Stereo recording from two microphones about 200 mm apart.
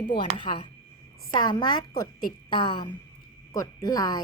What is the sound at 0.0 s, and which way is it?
Speech, 25° left (ahead or behind).